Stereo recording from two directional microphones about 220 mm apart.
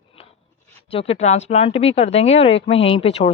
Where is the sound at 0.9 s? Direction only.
25° left (ahead or behind).